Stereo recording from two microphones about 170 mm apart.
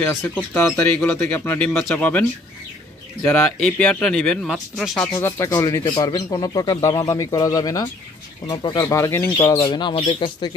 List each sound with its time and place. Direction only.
0.0 s speech: 10° left (ahead or behind)
5.2 s speech: 20° left (ahead or behind)